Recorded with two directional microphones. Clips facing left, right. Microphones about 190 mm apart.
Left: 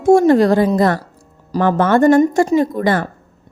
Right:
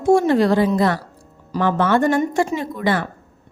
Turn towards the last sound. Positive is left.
turn(degrees=45)  # may be behind; listen again after turning